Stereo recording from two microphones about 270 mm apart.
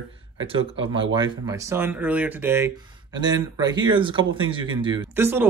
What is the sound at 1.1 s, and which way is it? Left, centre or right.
Speech, centre.